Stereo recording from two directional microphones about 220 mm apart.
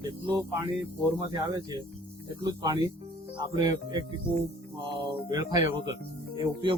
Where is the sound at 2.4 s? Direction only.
15° right (ahead or behind).